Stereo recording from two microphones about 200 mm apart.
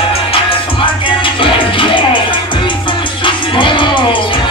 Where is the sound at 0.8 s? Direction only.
25° left (ahead or behind).